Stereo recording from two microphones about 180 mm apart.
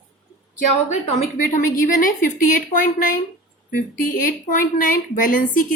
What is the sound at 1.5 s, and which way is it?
A woman's voice, 45° left (ahead or behind).